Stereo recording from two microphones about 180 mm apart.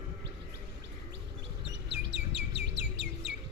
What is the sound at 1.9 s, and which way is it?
Bird, 75° right (ahead or behind).